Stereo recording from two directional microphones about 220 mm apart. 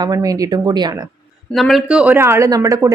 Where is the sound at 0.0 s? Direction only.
15° right (ahead or behind).